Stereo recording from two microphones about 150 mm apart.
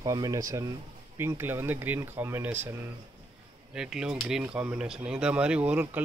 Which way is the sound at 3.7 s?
5° right (ahead or behind).